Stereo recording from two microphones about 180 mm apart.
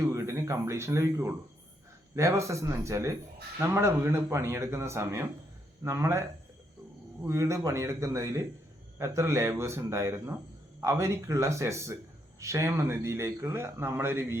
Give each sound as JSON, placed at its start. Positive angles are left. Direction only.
{"t": 0.0, "sound": "speech", "side_deg": -15}
{"t": 7.3, "sound": "speech", "side_deg": -15}